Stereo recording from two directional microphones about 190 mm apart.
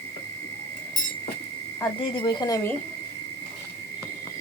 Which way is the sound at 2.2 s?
25° left (ahead or behind).